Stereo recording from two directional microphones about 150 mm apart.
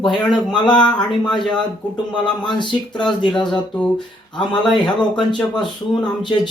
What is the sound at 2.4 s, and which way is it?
Speech, 30° left (ahead or behind).